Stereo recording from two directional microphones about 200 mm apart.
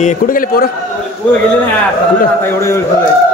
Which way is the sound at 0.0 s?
40° left (ahead or behind).